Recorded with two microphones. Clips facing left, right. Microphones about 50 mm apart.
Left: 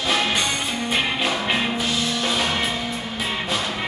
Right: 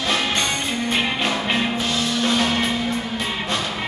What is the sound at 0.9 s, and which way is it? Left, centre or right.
Music, centre.